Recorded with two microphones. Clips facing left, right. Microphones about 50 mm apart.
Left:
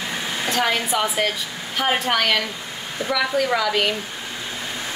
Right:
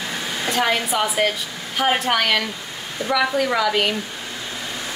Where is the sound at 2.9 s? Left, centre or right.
Centre.